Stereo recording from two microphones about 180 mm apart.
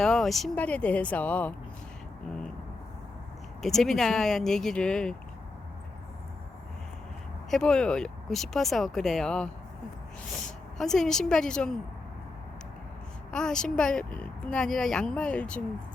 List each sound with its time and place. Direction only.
0.0 s speech: centre (ahead or behind)
3.6 s a woman's voice: centre (ahead or behind)
7.5 s a woman's voice: 5° left (ahead or behind)
10.8 s a woman's voice: centre (ahead or behind)
13.3 s a woman's voice: 5° left (ahead or behind)